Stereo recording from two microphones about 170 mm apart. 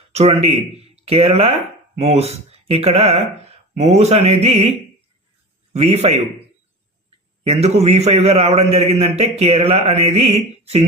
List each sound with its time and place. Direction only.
0.1 s a man's voice: 40° right (ahead or behind)
5.7 s a man's voice: 40° right (ahead or behind)
7.4 s a man's voice: 40° right (ahead or behind)